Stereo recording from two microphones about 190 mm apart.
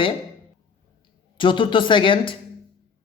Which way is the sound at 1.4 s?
25° left (ahead or behind).